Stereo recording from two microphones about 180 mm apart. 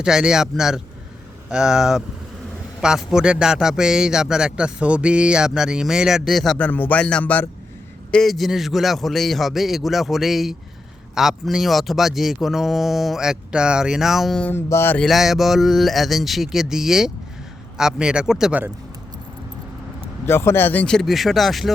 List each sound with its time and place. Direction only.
0.0 s a man's voice: 5° right (ahead or behind); by 15.0 s 10° left (ahead or behind)
15.0 s a man's voice: centre (ahead or behind)
20.2 s a man's voice: 15° left (ahead or behind)